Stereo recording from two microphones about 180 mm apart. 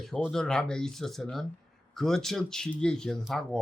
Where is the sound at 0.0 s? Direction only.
Centre (ahead or behind).